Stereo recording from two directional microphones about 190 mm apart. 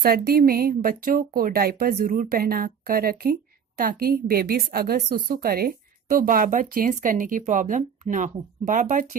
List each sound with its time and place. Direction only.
0.0 s a woman's voice: 50° right (ahead or behind)